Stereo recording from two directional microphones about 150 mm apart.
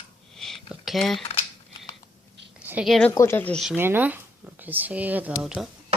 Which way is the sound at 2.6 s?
10° right (ahead or behind).